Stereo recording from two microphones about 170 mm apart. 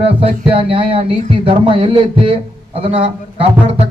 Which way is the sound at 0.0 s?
35° right (ahead or behind).